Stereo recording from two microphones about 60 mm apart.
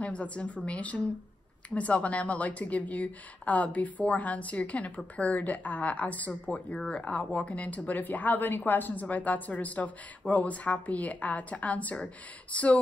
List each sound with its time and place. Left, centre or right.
0.0 s speech: left